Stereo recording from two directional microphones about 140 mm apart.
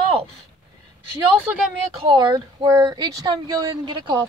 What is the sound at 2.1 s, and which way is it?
Speech, 30° right (ahead or behind).